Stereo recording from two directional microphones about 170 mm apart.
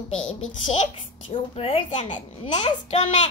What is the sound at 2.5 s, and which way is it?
Speech, 30° left (ahead or behind).